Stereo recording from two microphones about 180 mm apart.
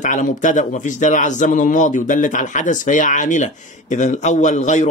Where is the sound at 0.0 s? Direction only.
45° left (ahead or behind).